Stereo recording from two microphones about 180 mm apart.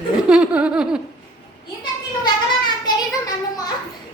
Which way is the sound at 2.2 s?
25° left (ahead or behind).